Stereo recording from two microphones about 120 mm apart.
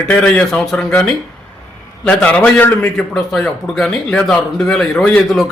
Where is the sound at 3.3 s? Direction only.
Centre (ahead or behind).